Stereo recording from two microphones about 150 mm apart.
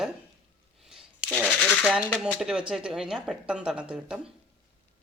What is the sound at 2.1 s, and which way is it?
Speech, 5° right (ahead or behind).